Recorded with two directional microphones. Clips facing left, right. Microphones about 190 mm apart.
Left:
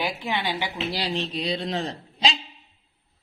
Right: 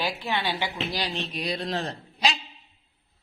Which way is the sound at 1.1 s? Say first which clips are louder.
Left 3 dB; 25° left (ahead or behind).